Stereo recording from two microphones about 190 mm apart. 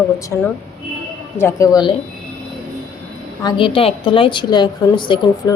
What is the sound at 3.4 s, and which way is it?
A woman's voice, 25° left (ahead or behind).